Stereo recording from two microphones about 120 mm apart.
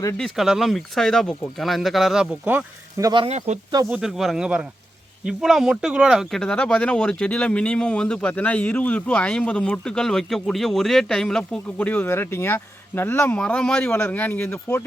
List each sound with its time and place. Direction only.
0.2 s speech: 5° right (ahead or behind)
2.4 s speech: 15° right (ahead or behind)
3.0 s speech: 40° right (ahead or behind)
3.2 s speech: 70° right (ahead or behind)
3.9 s speech: centre (ahead or behind)
6.4 s speech: 5° left (ahead or behind)